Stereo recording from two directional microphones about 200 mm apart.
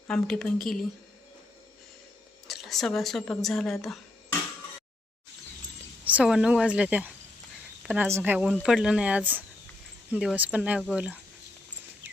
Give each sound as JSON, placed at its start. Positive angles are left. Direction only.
{"t": 0.1, "sound": "speech", "side_deg": 0}
{"t": 2.5, "sound": "speech", "side_deg": 0}
{"t": 6.1, "sound": "speech", "side_deg": -5}